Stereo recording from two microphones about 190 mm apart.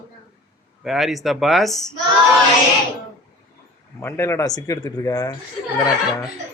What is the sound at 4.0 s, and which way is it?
Speech, 15° left (ahead or behind).